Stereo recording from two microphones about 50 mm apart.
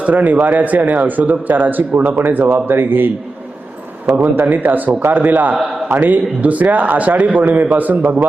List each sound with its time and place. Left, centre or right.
0.0 s a man's voice: right
4.0 s a man's voice: right